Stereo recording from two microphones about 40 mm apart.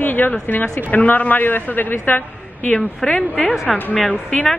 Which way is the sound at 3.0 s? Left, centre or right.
Centre.